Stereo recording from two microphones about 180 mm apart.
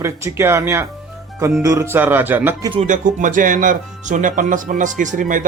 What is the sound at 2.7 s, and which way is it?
Speech, 40° right (ahead or behind).